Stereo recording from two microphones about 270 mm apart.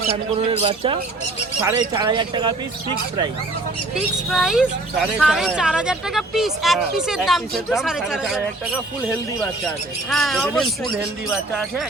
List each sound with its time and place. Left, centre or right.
0.5 s speech: right
3.9 s speech: centre
10.1 s speech: centre